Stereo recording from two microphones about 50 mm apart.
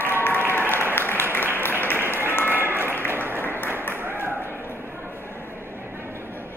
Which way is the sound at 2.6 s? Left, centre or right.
Right.